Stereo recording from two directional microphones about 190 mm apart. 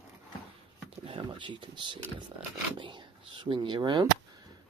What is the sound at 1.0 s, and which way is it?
Speech, 25° right (ahead or behind).